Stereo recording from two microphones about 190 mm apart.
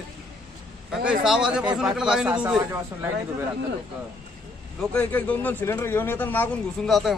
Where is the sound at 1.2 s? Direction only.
Centre (ahead or behind).